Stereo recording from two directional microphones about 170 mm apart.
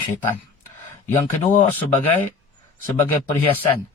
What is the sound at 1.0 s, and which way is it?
Speech, 45° left (ahead or behind).